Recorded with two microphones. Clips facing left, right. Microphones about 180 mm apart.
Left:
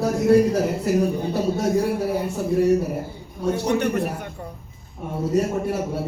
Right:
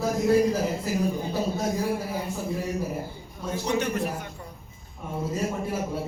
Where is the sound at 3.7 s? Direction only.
60° left (ahead or behind).